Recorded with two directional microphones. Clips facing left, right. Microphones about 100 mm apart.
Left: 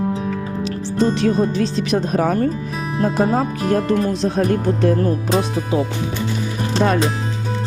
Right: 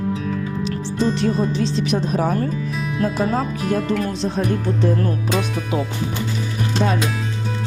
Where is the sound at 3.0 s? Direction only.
30° left (ahead or behind).